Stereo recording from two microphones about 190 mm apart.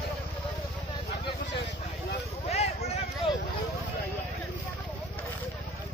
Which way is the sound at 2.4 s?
35° left (ahead or behind).